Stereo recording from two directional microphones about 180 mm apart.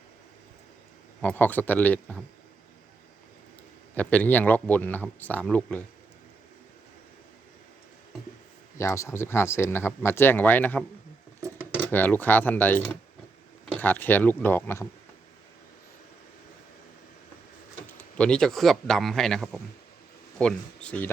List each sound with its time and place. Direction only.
1.2 s speech: 10° left (ahead or behind)
3.9 s speech: 10° left (ahead or behind)
8.8 s speech: 15° left (ahead or behind)
11.3 s a sound: 15° right (ahead or behind)
11.8 s speech: 10° left (ahead or behind)
18.2 s speech: 5° left (ahead or behind)